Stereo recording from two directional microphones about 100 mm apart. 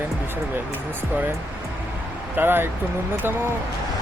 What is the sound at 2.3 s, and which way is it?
Speech, 20° right (ahead or behind).